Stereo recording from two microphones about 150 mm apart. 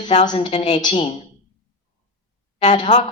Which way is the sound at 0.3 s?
40° left (ahead or behind).